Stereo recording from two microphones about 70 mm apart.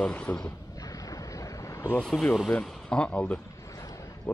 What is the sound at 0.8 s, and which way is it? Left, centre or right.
Boat, left.